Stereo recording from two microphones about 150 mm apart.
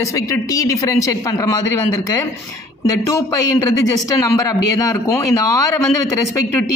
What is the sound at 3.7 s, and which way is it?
Speech, 15° left (ahead or behind).